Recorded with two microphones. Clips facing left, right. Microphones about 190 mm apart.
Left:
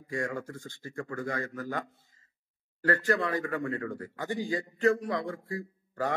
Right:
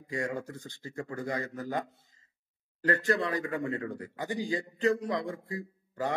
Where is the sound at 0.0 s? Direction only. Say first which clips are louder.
Even; 20° right (ahead or behind).